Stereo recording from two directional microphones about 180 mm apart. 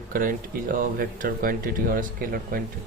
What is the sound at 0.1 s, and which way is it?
Speech, 50° right (ahead or behind).